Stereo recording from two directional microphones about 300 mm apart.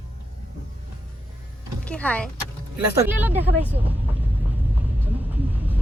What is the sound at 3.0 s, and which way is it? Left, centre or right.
Speech, centre.